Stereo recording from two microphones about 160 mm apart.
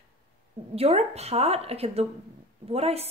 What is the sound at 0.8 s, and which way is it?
A woman's voice, 40° right (ahead or behind).